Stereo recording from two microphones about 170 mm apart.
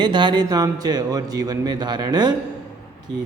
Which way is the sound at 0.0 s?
25° right (ahead or behind).